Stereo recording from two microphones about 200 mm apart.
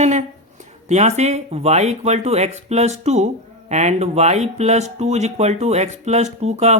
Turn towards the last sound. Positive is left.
turn(degrees=-35)  # may be behind; listen again after turning